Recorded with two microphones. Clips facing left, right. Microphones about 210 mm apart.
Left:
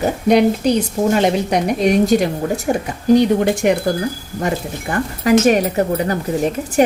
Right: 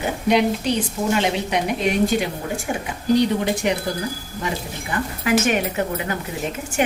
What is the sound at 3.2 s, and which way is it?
A woman's voice, 50° left (ahead or behind).